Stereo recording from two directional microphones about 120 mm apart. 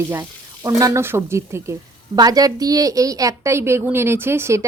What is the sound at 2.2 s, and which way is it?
Frying, 30° right (ahead or behind).